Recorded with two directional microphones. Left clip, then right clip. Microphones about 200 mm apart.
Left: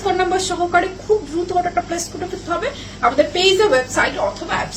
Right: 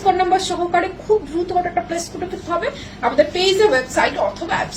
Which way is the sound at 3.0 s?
15° left (ahead or behind).